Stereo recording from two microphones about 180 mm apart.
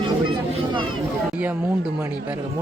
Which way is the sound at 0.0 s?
25° right (ahead or behind).